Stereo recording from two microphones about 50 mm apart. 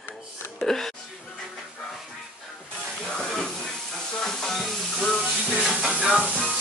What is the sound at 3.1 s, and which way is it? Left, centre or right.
Hiss, centre.